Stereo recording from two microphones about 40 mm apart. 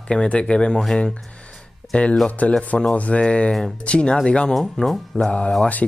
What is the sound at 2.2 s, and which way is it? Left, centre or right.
Speech, left.